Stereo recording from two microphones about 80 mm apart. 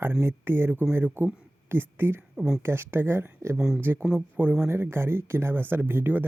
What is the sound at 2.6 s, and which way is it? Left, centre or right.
Speech, right.